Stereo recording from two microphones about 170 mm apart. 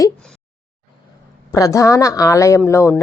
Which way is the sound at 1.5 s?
20° left (ahead or behind).